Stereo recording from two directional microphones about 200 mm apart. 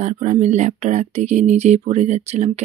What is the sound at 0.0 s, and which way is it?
Speech, 35° right (ahead or behind).